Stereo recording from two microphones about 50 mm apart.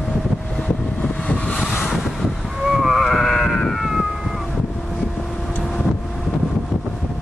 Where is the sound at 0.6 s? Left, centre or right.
Left.